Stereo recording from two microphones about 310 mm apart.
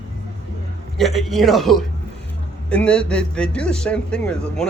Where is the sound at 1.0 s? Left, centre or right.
Centre.